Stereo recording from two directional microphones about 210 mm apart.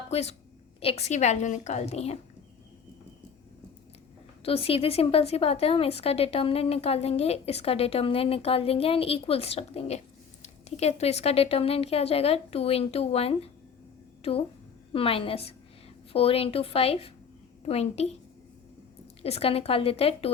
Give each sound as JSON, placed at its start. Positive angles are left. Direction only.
{"t": 0.1, "sound": "a woman's voice", "side_deg": 30}
{"t": 4.4, "sound": "a woman's voice", "side_deg": 25}
{"t": 14.9, "sound": "a woman's voice", "side_deg": 25}
{"t": 19.2, "sound": "a woman's voice", "side_deg": 30}